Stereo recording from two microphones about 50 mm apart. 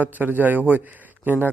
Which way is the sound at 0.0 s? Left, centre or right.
Right.